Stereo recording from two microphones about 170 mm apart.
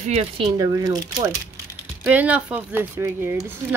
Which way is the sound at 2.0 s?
10° right (ahead or behind).